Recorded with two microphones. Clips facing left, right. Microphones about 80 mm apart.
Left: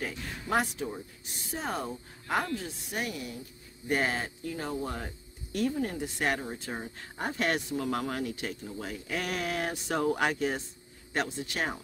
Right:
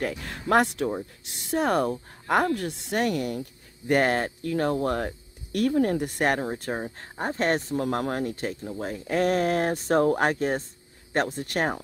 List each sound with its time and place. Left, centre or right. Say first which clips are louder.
0.0 s speech: right 7 dB; right